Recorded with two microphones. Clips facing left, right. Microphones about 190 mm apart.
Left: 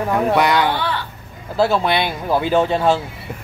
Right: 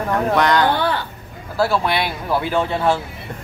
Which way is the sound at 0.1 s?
10° left (ahead or behind).